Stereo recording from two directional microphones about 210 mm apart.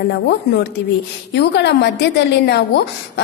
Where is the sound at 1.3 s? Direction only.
55° left (ahead or behind).